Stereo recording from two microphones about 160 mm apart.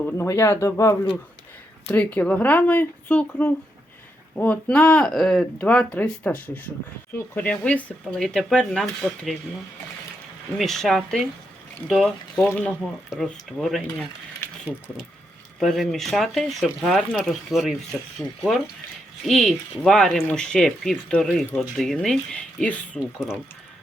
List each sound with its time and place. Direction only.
0.2 s speech: 15° left (ahead or behind); by 9.3 s centre (ahead or behind)
10.6 s speech: centre (ahead or behind)
14.4 s a sound: 15° left (ahead or behind)
15.5 s speech: centre (ahead or behind)
19.2 s speech: centre (ahead or behind)